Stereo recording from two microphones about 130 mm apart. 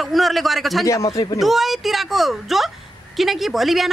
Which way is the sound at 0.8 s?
25° left (ahead or behind).